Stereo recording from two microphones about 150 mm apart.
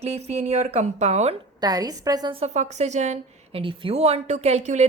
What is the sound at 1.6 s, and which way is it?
Speech, 25° right (ahead or behind).